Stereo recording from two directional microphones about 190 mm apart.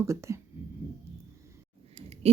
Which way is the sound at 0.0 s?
15° right (ahead or behind).